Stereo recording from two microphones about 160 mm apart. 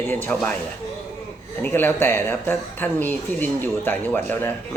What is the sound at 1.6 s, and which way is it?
Speech, 15° left (ahead or behind).